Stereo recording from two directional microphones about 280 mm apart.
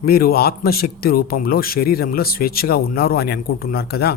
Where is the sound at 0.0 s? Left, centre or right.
Left.